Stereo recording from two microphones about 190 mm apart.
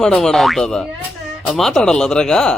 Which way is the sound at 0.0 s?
Centre (ahead or behind).